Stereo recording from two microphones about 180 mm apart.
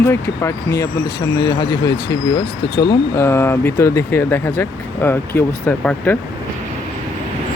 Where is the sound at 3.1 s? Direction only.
15° left (ahead or behind).